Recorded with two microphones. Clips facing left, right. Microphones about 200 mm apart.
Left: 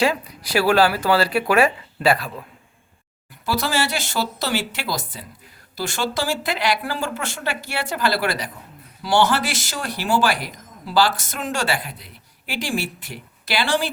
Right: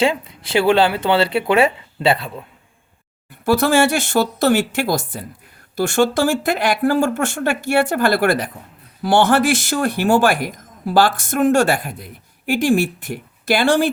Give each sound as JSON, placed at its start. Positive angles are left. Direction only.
{"t": 0.0, "sound": "speech", "side_deg": -25}
{"t": 3.4, "sound": "a man's voice", "side_deg": -55}